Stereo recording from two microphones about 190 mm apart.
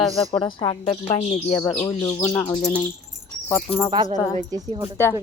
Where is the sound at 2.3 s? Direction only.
10° left (ahead or behind).